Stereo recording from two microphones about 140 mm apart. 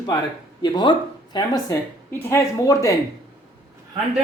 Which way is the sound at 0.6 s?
30° left (ahead or behind).